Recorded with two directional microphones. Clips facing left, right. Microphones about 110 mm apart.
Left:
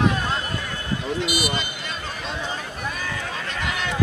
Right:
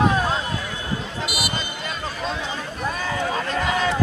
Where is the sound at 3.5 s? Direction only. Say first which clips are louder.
Right 6 dB; 40° right (ahead or behind).